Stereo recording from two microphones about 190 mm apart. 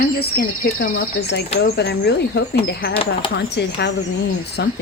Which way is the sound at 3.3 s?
65° left (ahead or behind).